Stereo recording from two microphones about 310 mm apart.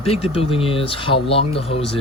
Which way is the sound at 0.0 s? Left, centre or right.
Centre.